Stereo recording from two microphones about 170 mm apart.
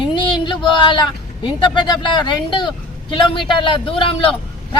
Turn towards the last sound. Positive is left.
turn(degrees=30)  # may be behind; listen again after turning